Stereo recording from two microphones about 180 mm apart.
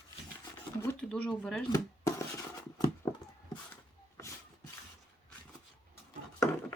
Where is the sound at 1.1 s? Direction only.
5° left (ahead or behind).